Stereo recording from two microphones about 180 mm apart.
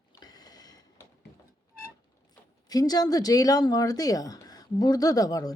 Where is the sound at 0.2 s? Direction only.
20° left (ahead or behind).